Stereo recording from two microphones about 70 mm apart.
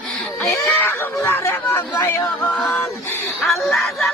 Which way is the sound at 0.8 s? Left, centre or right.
Left.